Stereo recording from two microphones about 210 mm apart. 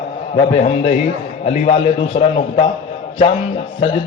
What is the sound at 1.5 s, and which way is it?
Speech, 25° left (ahead or behind).